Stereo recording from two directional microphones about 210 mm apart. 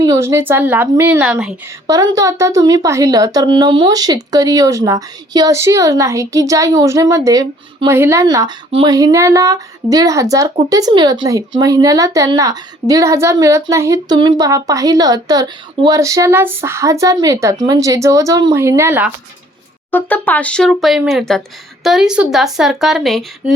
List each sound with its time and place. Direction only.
0.0 s speech: 15° right (ahead or behind)
1.9 s speech: 15° right (ahead or behind)
19.9 s speech: 10° left (ahead or behind)